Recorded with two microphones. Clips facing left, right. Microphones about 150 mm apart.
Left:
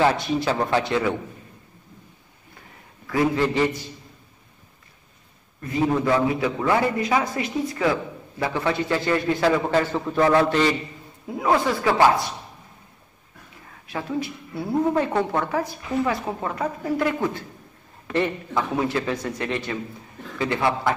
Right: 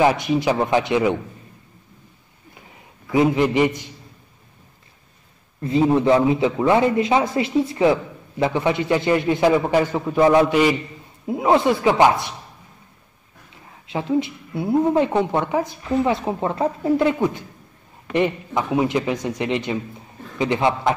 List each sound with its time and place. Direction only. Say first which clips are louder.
0.0 s speech: right 3 dB; 15° right (ahead or behind)
3.1 s speech: right 4 dB; 20° right (ahead or behind)
5.6 s a man's voice: right 5 dB; 25° right (ahead or behind)
11.2 s a man's voice: right 4 dB; 20° right (ahead or behind)
13.8 s a man's voice: right 6 dB; 20° right (ahead or behind)